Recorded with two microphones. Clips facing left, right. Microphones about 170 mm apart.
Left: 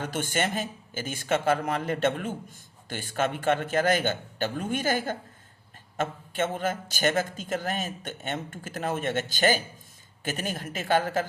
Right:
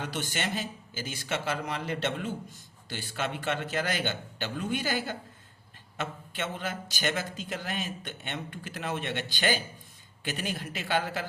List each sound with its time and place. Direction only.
0.0 s a man's voice: 50° left (ahead or behind)